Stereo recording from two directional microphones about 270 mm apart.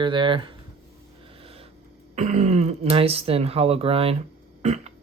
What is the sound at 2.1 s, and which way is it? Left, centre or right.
Speech, right.